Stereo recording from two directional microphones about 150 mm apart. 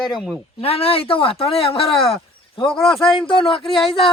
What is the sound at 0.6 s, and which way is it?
Speech, 40° left (ahead or behind).